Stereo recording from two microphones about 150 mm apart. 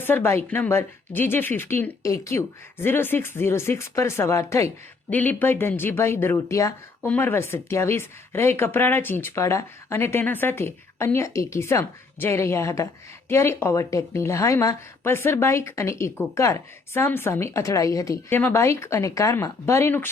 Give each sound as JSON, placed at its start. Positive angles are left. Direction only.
{"t": 0.0, "sound": "a woman's voice", "side_deg": 15}